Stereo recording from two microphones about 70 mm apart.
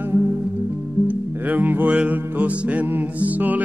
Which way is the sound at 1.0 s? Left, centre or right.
Right.